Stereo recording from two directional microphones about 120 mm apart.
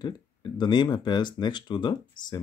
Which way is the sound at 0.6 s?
40° left (ahead or behind).